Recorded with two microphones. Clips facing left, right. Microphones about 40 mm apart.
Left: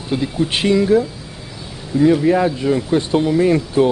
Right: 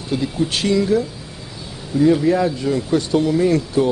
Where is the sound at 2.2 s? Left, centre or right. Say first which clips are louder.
Left 2 dB; left.